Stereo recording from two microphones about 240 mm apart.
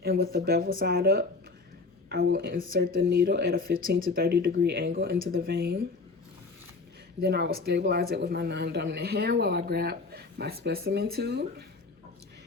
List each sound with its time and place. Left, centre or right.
0.0 s speech: right
2.2 s speech: right
7.2 s speech: right